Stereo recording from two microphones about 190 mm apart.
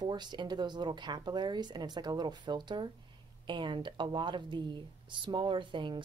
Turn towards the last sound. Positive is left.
turn(degrees=-25)  # may be behind; listen again after turning